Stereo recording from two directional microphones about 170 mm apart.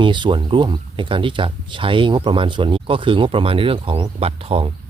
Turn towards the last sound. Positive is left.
turn(degrees=-35)  # may be behind; listen again after turning